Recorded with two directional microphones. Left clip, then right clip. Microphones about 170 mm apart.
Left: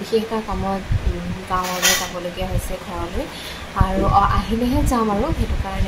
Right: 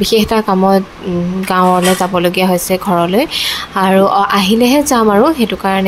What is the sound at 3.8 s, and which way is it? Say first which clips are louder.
A woman's voice: right 7 dB; 55° right (ahead or behind).